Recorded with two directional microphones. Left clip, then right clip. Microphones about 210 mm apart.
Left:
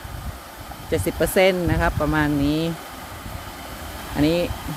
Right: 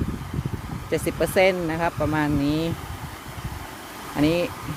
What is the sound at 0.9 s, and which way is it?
Speech, 5° right (ahead or behind).